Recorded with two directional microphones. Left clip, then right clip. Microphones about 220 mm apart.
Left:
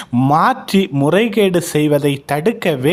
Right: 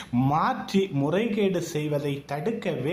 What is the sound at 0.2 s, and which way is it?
Speech, 40° left (ahead or behind).